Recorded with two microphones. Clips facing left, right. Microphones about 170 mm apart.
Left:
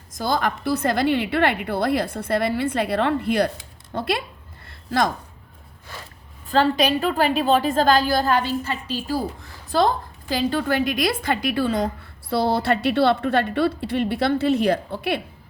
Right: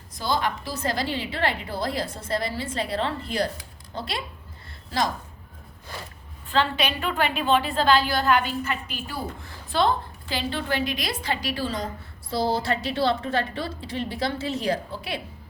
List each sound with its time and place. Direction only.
0.1 s a woman's voice: 50° left (ahead or behind)
6.5 s a woman's voice: 40° left (ahead or behind); by 15.2 s 60° left (ahead or behind)